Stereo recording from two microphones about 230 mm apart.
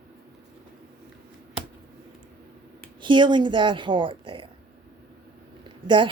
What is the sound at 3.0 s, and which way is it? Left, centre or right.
A woman's voice, centre.